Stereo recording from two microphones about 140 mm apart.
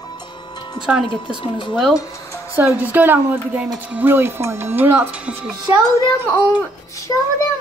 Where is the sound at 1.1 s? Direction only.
35° left (ahead or behind).